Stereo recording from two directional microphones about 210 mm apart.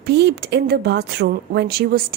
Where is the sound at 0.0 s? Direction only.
50° right (ahead or behind).